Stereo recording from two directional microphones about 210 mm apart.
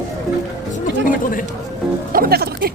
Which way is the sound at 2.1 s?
45° right (ahead or behind).